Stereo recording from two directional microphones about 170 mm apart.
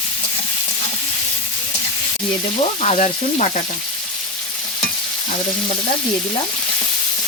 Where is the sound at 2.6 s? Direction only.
40° left (ahead or behind).